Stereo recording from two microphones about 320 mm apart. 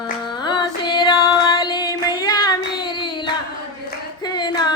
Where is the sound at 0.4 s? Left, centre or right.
Centre.